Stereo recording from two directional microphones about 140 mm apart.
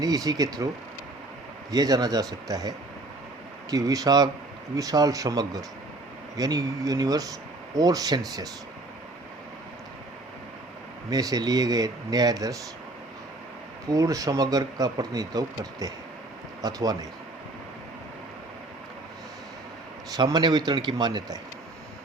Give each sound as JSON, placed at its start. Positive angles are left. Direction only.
{"t": 0.0, "sound": "speech", "side_deg": -25}
{"t": 1.7, "sound": "speech", "side_deg": -25}
{"t": 11.1, "sound": "speech", "side_deg": -25}
{"t": 13.9, "sound": "speech", "side_deg": -25}
{"t": 20.1, "sound": "a man's voice", "side_deg": -30}